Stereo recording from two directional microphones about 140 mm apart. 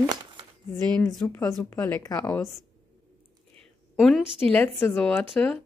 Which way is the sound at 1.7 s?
20° left (ahead or behind).